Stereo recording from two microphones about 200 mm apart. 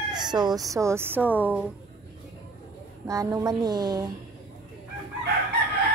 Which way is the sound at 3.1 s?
15° right (ahead or behind).